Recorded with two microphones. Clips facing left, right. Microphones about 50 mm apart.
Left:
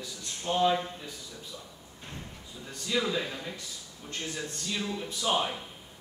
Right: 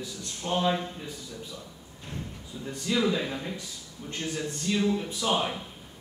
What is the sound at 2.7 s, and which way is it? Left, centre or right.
A man's voice, right.